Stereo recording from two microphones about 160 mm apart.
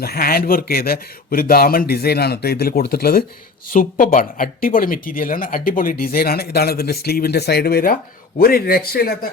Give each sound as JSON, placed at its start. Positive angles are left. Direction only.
{"t": 0.0, "sound": "speech", "side_deg": 70}
{"t": 3.7, "sound": "speech", "side_deg": 60}